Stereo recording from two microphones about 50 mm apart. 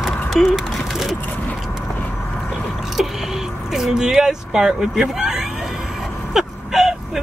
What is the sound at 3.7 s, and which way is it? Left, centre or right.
Speech, centre.